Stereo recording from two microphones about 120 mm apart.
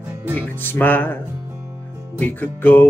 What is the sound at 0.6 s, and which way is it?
Music, 15° left (ahead or behind).